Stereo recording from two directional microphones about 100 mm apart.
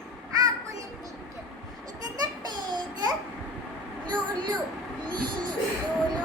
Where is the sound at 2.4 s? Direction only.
45° right (ahead or behind).